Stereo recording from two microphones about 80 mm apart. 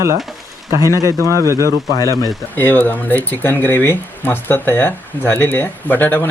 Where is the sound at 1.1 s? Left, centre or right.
Left.